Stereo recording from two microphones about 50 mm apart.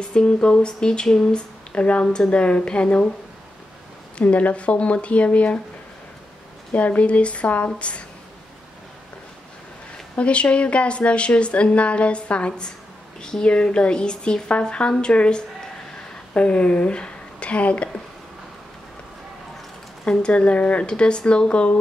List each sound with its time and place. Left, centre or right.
0.1 s speech: centre
2.0 s speech: centre
2.3 s a woman's voice: left
4.2 s a woman's voice: left
6.7 s a woman's voice: left
10.1 s a woman's voice: left
20.1 s a woman's voice: centre